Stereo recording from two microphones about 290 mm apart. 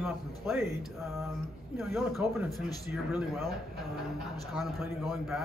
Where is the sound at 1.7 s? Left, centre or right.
Centre.